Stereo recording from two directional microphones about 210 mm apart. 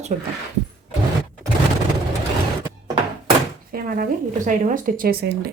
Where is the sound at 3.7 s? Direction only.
45° right (ahead or behind).